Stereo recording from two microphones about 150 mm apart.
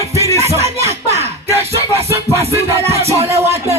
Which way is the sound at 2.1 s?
20° right (ahead or behind).